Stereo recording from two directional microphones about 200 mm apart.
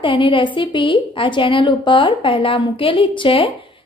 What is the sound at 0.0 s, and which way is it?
A woman's voice, 25° left (ahead or behind).